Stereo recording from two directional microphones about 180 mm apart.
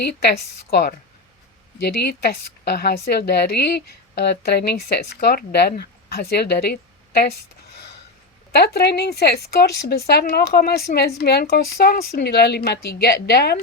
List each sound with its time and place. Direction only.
0.0 s a woman's voice: 65° left (ahead or behind)
8.5 s a woman's voice: 65° left (ahead or behind)